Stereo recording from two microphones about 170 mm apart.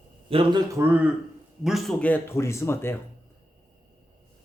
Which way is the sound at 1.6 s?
Centre (ahead or behind).